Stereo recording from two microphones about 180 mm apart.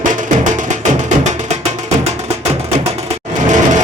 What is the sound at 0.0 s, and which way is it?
Music, 45° right (ahead or behind).